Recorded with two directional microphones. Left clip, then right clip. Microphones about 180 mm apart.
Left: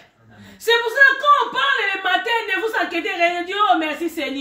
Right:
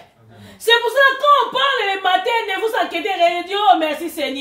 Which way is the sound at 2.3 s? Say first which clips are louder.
Right 2 dB; 35° right (ahead or behind).